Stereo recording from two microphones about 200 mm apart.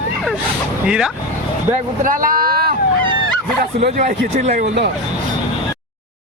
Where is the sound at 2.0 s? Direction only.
45° right (ahead or behind).